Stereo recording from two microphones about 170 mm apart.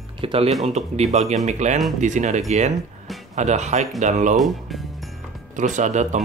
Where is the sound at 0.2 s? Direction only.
35° right (ahead or behind).